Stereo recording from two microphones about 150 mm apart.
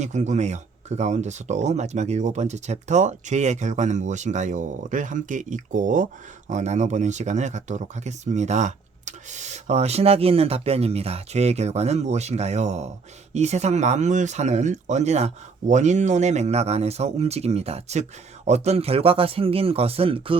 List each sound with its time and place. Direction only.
0.0 s speech: 50° right (ahead or behind)